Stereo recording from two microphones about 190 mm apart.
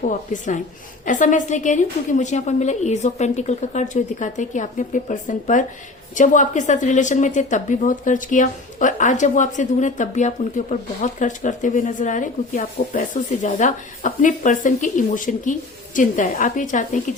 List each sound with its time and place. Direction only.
0.0 s a woman's voice: 40° left (ahead or behind)